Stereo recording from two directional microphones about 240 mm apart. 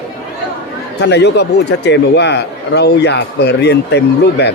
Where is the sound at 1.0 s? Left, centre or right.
Left.